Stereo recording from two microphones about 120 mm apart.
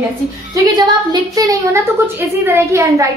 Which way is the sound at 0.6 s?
35° right (ahead or behind).